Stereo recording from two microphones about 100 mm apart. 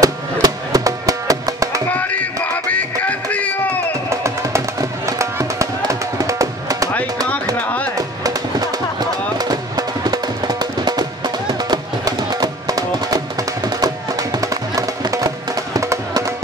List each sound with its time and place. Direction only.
0.0 s music: 35° right (ahead or behind)
1.9 s music: 15° left (ahead or behind)
4.1 s music: 30° right (ahead or behind)
7.5 s music: 15° left (ahead or behind)
8.2 s music: 40° right (ahead or behind)